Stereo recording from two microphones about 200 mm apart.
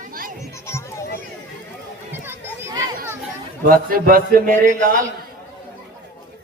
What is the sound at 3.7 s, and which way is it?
Speech, 45° right (ahead or behind).